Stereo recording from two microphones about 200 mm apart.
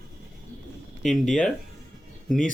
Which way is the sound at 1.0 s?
Centre (ahead or behind).